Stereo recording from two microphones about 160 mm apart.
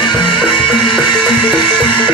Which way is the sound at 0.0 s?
30° left (ahead or behind).